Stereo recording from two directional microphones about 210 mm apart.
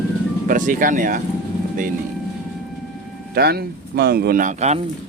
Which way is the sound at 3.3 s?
50° right (ahead or behind).